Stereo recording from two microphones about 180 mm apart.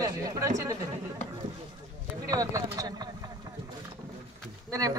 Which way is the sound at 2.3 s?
20° right (ahead or behind).